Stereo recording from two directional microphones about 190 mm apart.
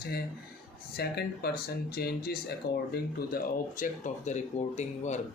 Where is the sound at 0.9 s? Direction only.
55° left (ahead or behind).